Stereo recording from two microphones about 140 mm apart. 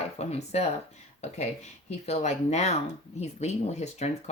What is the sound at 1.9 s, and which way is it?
Speech, 50° left (ahead or behind).